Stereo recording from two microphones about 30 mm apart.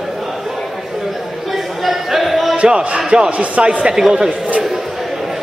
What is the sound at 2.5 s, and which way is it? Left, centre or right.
Speech, right.